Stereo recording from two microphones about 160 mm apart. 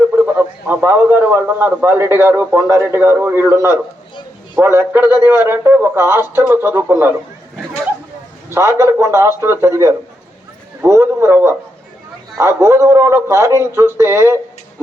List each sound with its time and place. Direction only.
0.3 s a man's voice: 15° right (ahead or behind)
8.5 s a man's voice: 15° right (ahead or behind)